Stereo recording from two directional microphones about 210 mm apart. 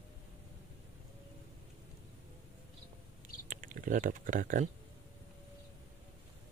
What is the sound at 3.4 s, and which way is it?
Typing, 40° right (ahead or behind).